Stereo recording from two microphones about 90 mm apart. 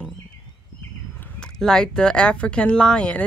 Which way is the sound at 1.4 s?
5° left (ahead or behind).